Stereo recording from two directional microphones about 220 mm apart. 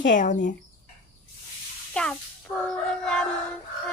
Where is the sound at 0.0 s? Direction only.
35° left (ahead or behind).